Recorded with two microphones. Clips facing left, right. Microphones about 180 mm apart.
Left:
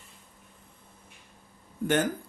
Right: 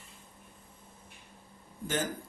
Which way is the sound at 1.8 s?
65° left (ahead or behind).